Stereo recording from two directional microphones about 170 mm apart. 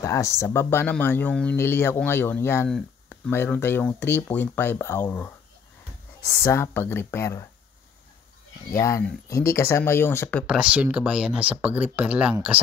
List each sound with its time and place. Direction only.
0.0 s speech: 20° left (ahead or behind)
6.4 s speech: 15° left (ahead or behind)
8.7 s speech: 20° left (ahead or behind)
10.4 s speech: 5° right (ahead or behind)